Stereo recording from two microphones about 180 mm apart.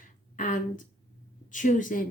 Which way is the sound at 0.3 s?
45° left (ahead or behind).